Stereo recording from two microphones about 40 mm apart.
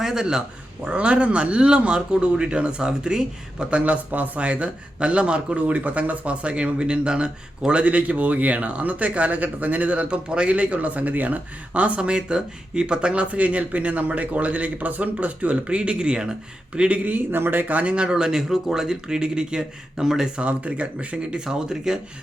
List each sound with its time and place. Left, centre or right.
0.0 s speech: centre
0.9 s speech: right
16.9 s speech: right
17.3 s speech: right
17.9 s speech: right
20.3 s speech: right; by 21.9 s centre